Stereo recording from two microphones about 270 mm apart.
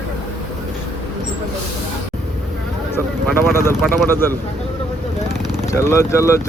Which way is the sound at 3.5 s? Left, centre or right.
Centre.